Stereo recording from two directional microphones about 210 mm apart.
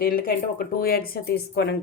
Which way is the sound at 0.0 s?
45° left (ahead or behind).